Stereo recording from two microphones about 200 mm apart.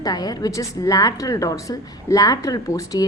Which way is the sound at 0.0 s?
20° left (ahead or behind).